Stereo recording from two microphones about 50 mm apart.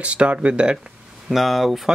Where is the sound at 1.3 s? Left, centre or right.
Centre.